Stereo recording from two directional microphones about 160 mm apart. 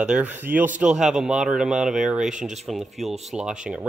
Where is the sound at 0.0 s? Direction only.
10° right (ahead or behind).